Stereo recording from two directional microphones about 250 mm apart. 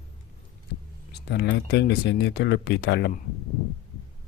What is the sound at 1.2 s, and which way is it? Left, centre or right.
Speech, left.